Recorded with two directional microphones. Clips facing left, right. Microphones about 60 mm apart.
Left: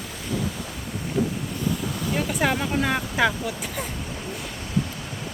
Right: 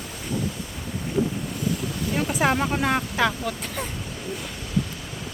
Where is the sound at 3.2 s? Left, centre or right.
Centre.